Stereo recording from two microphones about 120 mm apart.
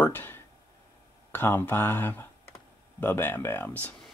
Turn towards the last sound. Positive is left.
turn(degrees=15)  # may be behind; listen again after turning